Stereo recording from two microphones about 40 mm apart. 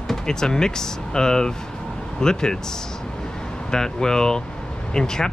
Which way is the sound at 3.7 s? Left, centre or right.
Centre.